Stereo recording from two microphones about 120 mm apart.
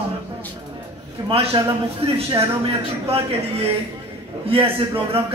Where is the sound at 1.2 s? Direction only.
55° right (ahead or behind).